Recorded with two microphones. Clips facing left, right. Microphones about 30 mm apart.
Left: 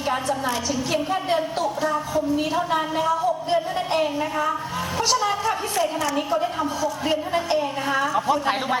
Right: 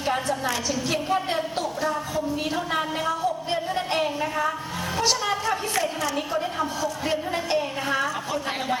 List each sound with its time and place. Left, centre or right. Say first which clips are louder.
0.0 s a woman's voice: left 1 dB; centre
8.3 s a woman's voice: left 5 dB; left